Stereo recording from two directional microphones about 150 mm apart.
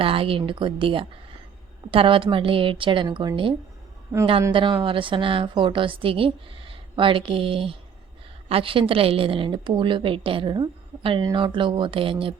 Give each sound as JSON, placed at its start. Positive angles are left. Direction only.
{"t": 0.0, "sound": "a woman's voice", "side_deg": -35}
{"t": 4.5, "sound": "a woman's voice", "side_deg": -35}